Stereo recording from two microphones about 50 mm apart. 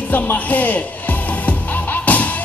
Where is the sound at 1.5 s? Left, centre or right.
Left.